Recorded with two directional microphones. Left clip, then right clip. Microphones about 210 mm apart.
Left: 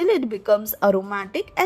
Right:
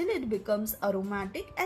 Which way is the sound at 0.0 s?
55° left (ahead or behind).